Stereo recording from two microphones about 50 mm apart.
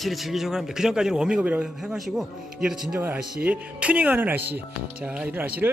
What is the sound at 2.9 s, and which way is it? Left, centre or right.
Speech, right.